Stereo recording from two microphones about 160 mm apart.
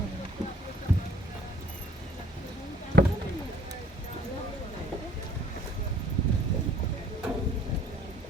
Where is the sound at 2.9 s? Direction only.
90° right.